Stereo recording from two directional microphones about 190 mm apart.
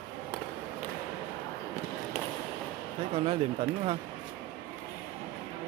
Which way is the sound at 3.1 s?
30° right (ahead or behind).